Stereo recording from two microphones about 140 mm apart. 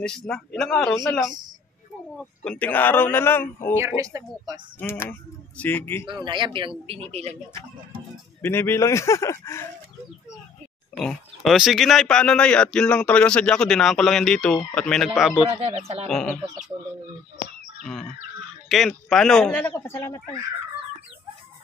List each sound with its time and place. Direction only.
0.3 s speech: 5° left (ahead or behind)
2.1 s a man's voice: 10° left (ahead or behind)
3.7 s speech: 20° right (ahead or behind)
4.7 s a man's voice: 15° left (ahead or behind)
6.0 s speech: 35° right (ahead or behind)
6.9 s speech: 50° right (ahead or behind)
8.4 s speech: 15° left (ahead or behind)
11.0 s speech: centre (ahead or behind)
18.7 s speech: centre (ahead or behind)
19.7 s speech: 20° left (ahead or behind)